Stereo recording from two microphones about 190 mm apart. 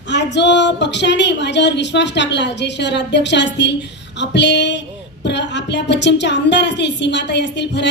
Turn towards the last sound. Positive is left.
turn(degrees=65)  # may be behind; listen again after turning